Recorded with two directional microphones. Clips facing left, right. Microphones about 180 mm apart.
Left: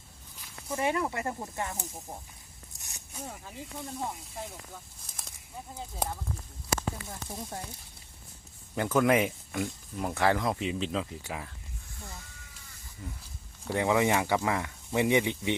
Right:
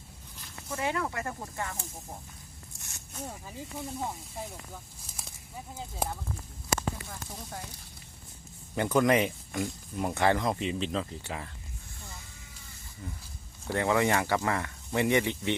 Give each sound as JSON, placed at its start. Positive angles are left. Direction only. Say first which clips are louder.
{"t": 0.8, "sound": "speech", "louder": "left 2 dB", "side_deg": 15}
{"t": 2.7, "sound": "zipper", "louder": "right 1 dB", "side_deg": 15}
{"t": 3.2, "sound": "speech", "louder": "right 1 dB", "side_deg": -5}
{"t": 8.7, "sound": "speech", "louder": "even", "side_deg": 0}
{"t": 13.7, "sound": "speech", "louder": "left 1 dB", "side_deg": 15}